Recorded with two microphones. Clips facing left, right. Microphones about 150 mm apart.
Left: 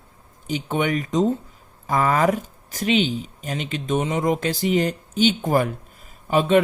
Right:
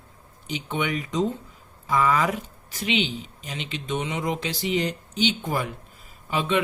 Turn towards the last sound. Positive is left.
turn(degrees=45)  # may be behind; listen again after turning